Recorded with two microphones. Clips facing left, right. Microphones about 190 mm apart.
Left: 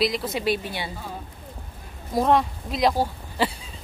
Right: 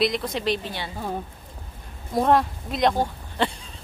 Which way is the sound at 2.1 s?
Centre (ahead or behind).